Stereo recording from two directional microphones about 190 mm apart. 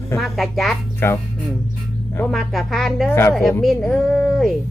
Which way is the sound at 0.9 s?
10° left (ahead or behind).